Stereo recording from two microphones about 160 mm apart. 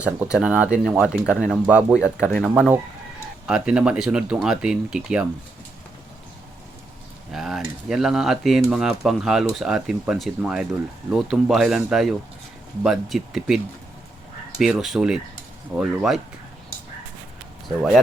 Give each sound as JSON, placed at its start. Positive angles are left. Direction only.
{"t": 0.0, "sound": "speech", "side_deg": -5}
{"t": 7.3, "sound": "speech", "side_deg": 0}
{"t": 14.6, "sound": "speech", "side_deg": 0}